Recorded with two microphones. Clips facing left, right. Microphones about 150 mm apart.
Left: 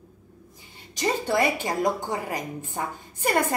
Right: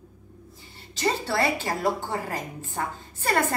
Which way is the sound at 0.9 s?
15° left (ahead or behind).